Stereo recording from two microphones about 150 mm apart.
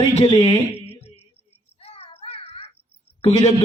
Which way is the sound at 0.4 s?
40° left (ahead or behind).